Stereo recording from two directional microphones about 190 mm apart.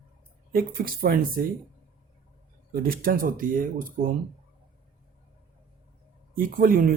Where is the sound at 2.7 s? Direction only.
50° right (ahead or behind).